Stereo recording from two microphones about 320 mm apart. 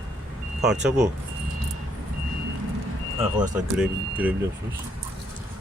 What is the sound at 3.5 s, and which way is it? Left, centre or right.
Speech, centre.